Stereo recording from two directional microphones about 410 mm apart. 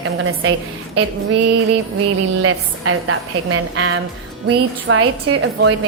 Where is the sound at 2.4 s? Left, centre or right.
Right.